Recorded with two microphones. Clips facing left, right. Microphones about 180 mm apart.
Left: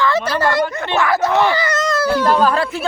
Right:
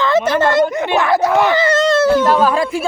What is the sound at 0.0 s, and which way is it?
Speech, 20° right (ahead or behind).